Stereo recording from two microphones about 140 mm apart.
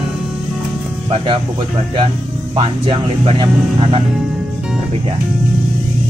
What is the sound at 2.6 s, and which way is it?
Speech, 40° right (ahead or behind).